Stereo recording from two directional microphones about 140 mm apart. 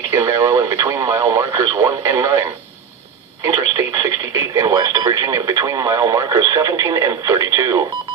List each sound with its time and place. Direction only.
0.1 s speech: 20° right (ahead or behind)
3.5 s speech: 25° right (ahead or behind)